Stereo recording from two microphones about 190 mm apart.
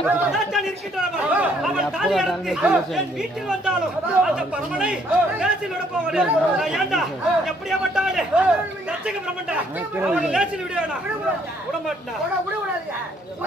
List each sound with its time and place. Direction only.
0.0 s speech: centre (ahead or behind)